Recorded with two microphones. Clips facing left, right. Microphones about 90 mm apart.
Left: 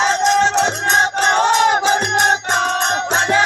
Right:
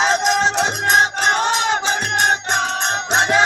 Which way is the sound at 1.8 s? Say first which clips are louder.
Left 5 dB; 55° left (ahead or behind).